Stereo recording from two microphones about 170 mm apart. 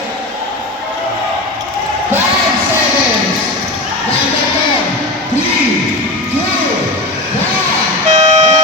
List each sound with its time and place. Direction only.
8.1 s vehicle: 45° right (ahead or behind)